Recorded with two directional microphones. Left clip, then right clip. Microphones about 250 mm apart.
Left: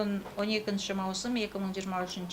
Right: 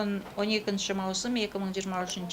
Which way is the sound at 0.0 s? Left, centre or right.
Centre.